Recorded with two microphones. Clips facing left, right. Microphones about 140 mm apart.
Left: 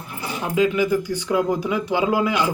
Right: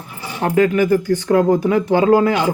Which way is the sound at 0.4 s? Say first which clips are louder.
Right 5 dB; 55° right (ahead or behind).